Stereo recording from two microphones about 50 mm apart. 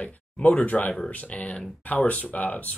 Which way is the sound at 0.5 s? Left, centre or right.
Left.